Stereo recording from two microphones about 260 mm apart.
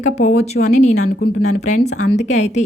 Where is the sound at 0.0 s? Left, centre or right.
Left.